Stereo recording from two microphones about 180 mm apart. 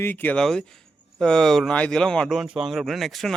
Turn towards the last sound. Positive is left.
turn(degrees=0)  # may be behind; listen again after turning